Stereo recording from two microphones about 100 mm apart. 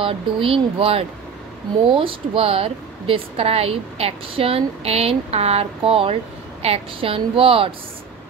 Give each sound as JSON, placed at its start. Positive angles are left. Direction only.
{"t": 0.0, "sound": "speech", "side_deg": -70}